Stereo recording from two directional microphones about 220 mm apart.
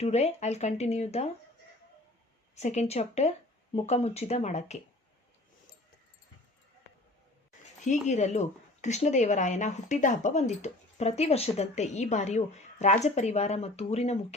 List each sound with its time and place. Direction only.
0.0 s speech: 30° left (ahead or behind)
2.6 s speech: 30° left (ahead or behind)
8.0 s speech: 30° left (ahead or behind)